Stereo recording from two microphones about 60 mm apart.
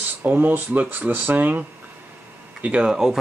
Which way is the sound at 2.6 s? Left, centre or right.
Centre.